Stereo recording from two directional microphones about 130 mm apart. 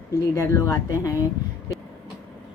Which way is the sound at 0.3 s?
25° left (ahead or behind).